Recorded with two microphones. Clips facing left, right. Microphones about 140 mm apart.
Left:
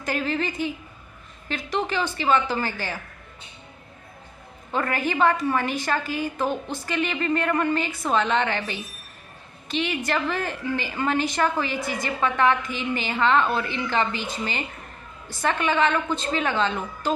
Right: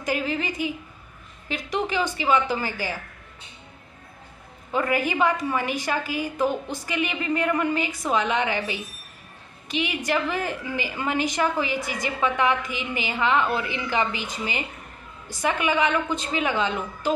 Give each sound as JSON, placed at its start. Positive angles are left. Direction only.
{"t": 0.0, "sound": "a woman's voice", "side_deg": -10}
{"t": 4.7, "sound": "a woman's voice", "side_deg": -10}